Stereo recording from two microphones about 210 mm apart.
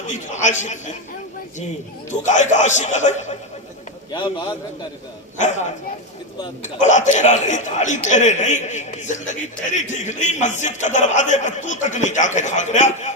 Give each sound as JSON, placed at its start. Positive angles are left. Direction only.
{"t": 0.1, "sound": "a man's voice", "side_deg": 35}
{"t": 2.0, "sound": "a man's voice", "side_deg": 35}
{"t": 4.1, "sound": "a man's voice", "side_deg": 20}
{"t": 6.4, "sound": "a man's voice", "side_deg": 35}